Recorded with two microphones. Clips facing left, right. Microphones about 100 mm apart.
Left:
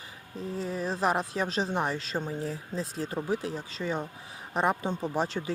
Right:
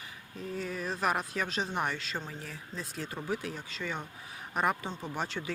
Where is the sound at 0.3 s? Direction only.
30° left (ahead or behind).